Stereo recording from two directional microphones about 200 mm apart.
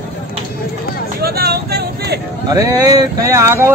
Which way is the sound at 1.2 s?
50° right (ahead or behind).